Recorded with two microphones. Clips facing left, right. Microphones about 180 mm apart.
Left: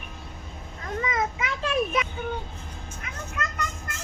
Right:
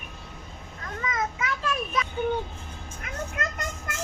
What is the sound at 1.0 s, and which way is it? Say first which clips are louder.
Children playing: even; 25° left (ahead or behind).